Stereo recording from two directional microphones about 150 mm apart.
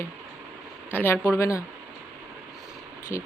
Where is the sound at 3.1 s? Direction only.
20° left (ahead or behind).